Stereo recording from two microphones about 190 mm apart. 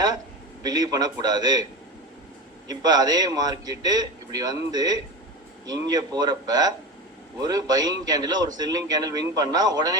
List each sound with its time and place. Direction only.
0.6 s a man's voice: 20° right (ahead or behind)
2.6 s a man's voice: 20° right (ahead or behind)